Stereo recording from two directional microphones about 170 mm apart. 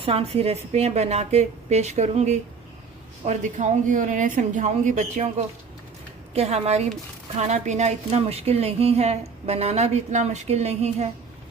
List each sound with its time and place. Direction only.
0.0 s a woman's voice: 35° right (ahead or behind)